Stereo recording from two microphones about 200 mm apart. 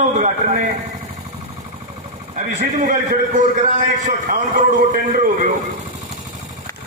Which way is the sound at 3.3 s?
35° right (ahead or behind).